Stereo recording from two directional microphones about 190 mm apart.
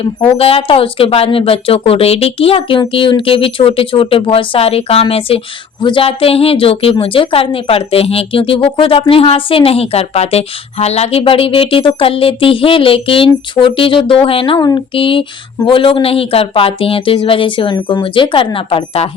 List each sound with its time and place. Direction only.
0.3 s a woman's voice: 30° left (ahead or behind)